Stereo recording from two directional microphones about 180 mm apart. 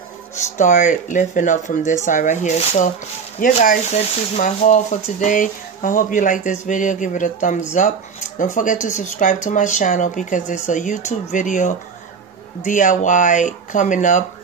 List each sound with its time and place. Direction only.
0.6 s speech: 45° left (ahead or behind)